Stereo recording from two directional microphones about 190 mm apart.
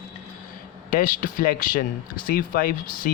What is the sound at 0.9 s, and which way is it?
Speech, 50° left (ahead or behind).